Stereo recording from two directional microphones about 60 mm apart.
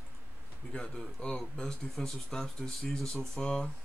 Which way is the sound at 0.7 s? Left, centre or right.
Centre.